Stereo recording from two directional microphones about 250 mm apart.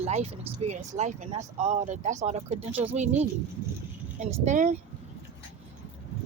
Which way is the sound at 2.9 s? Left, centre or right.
Right.